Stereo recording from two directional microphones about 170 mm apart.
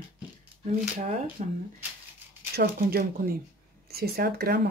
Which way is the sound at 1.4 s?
45° right (ahead or behind).